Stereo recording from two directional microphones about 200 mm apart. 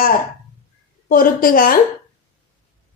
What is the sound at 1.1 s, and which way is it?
Speech, 45° left (ahead or behind).